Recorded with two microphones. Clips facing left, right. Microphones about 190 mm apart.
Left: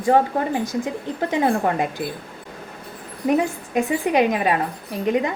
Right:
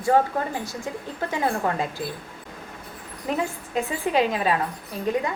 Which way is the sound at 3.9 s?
15° left (ahead or behind).